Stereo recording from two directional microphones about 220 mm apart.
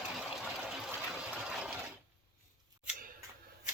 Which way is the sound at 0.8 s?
5° right (ahead or behind).